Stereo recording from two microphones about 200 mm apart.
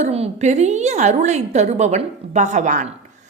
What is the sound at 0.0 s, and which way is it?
A woman's voice, 35° right (ahead or behind).